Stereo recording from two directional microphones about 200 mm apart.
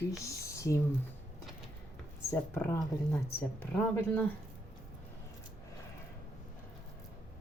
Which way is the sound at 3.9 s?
10° left (ahead or behind).